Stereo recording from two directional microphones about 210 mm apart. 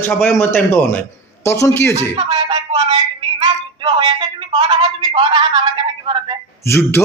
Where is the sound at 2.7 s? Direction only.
30° right (ahead or behind).